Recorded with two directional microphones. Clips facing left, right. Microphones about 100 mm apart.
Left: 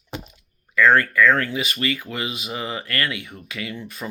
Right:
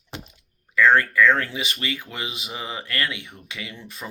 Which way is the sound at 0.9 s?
25° right (ahead or behind).